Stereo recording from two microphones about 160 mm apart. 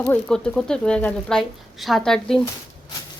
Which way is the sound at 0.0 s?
5° left (ahead or behind).